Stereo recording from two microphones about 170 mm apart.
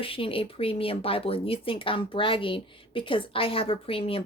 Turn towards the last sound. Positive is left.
turn(degrees=35)  # may be behind; listen again after turning